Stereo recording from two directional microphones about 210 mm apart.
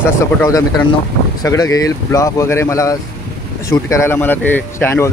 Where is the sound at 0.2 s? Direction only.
15° left (ahead or behind).